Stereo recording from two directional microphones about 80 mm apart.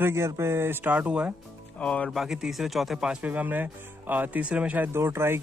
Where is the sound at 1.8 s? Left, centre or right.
Centre.